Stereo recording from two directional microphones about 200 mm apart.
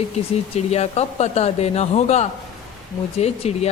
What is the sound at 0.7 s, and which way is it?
Speech, 30° left (ahead or behind).